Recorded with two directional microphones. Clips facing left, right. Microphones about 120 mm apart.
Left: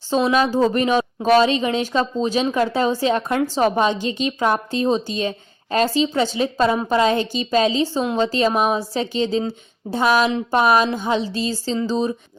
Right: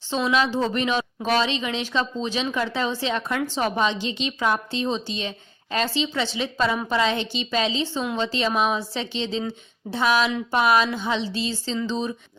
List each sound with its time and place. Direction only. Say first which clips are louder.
0.1 s speech: left 5 dB; 40° left (ahead or behind)